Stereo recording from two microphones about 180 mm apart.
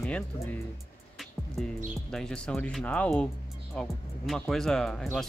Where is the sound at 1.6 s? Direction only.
Centre (ahead or behind).